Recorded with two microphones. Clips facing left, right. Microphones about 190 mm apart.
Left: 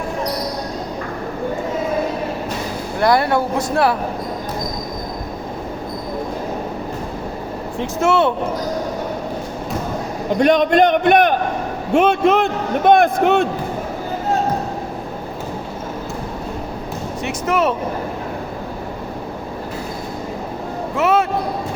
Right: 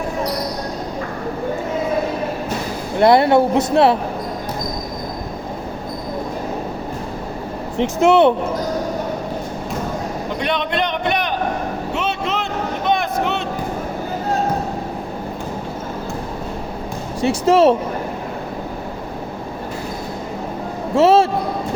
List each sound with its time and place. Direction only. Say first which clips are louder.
3.0 s speech: right 4 dB; 25° right (ahead or behind)
7.8 s speech: right 4 dB; 20° right (ahead or behind)
10.4 s a man's voice: left 9 dB; 45° left (ahead or behind)
11.9 s a sound: left 11 dB; 50° left (ahead or behind)
17.2 s speech: right 6 dB; 30° right (ahead or behind)
20.9 s speech: right 5 dB; 30° right (ahead or behind)